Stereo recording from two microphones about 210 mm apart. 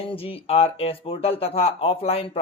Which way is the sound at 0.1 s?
25° left (ahead or behind).